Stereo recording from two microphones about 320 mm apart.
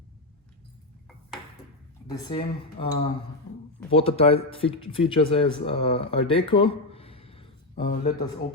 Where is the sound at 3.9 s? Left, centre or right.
Centre.